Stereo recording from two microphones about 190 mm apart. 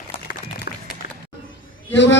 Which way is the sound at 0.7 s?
55° left (ahead or behind).